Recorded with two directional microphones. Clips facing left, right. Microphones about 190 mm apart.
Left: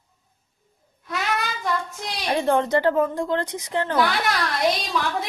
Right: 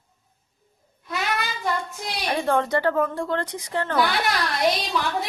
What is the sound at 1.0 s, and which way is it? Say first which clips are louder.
Child singing: left 1 dB; centre (ahead or behind).